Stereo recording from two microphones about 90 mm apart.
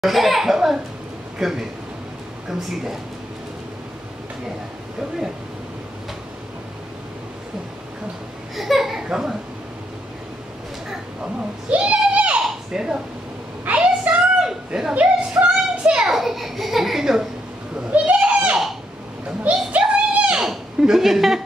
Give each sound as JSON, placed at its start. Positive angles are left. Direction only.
{"t": 0.0, "sound": "a child's voice", "side_deg": 0}
{"t": 8.5, "sound": "speech", "side_deg": 0}
{"t": 11.7, "sound": "a sound", "side_deg": -15}